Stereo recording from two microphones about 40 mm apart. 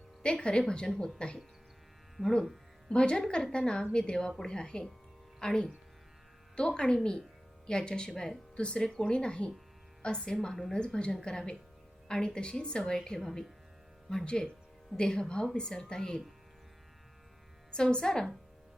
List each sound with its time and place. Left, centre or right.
0.2 s a woman's voice: left
2.9 s a woman's voice: left
8.5 s a woman's voice: left
17.9 s a woman's voice: centre